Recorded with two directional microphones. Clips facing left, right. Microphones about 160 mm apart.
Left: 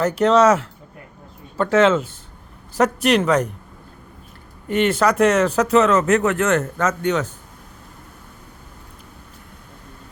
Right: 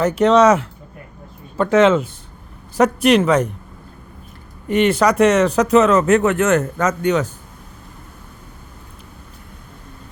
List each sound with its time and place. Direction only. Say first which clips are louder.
0.0 s speech: right 2 dB; 10° right (ahead or behind)
4.7 s speech: right 3 dB; 15° right (ahead or behind)